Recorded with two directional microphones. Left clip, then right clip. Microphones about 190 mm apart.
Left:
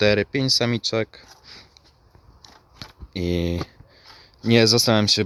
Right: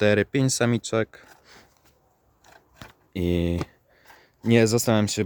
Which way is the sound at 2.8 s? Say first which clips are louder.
Left 1 dB; 20° right (ahead or behind).